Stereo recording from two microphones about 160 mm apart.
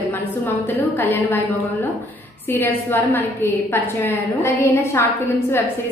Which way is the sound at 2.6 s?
15° left (ahead or behind).